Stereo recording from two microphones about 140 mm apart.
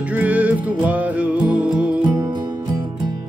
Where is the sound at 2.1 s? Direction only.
30° right (ahead or behind).